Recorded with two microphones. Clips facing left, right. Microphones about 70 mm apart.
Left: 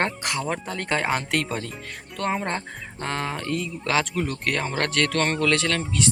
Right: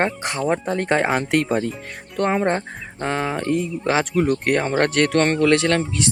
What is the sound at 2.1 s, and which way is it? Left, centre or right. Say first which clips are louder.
Speech: right 6 dB; right.